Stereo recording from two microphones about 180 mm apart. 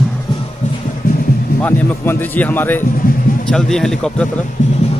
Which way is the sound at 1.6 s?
10° left (ahead or behind).